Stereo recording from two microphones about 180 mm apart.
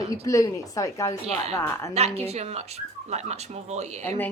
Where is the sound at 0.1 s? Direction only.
20° left (ahead or behind).